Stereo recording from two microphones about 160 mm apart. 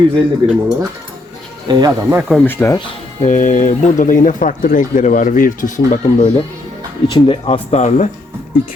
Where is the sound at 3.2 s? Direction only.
50° left (ahead or behind).